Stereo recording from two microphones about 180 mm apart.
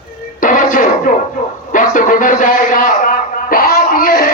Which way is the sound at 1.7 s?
45° left (ahead or behind).